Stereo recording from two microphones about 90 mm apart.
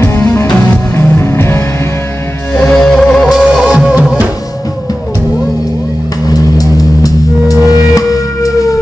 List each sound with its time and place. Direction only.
0.0 s music: 30° left (ahead or behind)
2.5 s music: 10° left (ahead or behind)
6.3 s music: 45° left (ahead or behind)